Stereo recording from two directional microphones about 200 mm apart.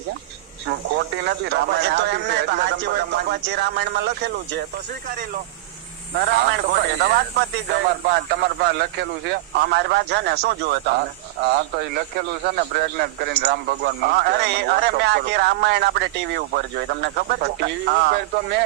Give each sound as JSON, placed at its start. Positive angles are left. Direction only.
{"t": 0.7, "sound": "speech", "side_deg": -60}
{"t": 6.1, "sound": "speech", "side_deg": -50}
{"t": 11.9, "sound": "speech", "side_deg": -50}